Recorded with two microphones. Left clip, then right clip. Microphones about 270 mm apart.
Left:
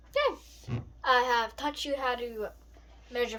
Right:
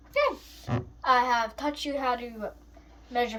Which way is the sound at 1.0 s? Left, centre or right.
Left.